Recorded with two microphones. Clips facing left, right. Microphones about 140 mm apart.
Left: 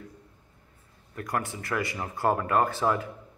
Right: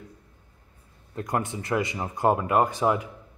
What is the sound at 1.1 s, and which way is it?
Speech, 20° right (ahead or behind).